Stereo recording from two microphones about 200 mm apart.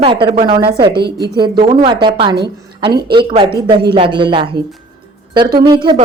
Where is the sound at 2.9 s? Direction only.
50° right (ahead or behind).